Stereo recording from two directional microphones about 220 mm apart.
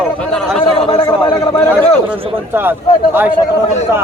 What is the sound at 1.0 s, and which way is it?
Speech, 15° left (ahead or behind).